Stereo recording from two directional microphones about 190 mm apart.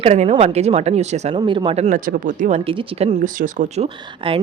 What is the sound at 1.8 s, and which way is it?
Speech, 45° right (ahead or behind).